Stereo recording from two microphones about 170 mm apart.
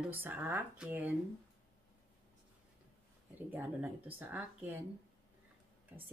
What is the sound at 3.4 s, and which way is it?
Speech, 10° right (ahead or behind).